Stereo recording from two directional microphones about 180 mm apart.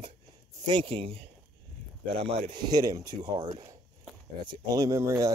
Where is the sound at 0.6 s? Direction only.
25° right (ahead or behind).